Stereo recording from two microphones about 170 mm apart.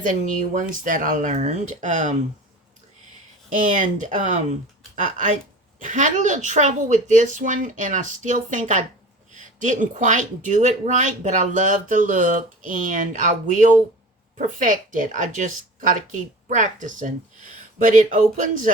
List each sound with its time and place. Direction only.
0.0 s speech: 50° right (ahead or behind)
3.6 s speech: 45° right (ahead or behind)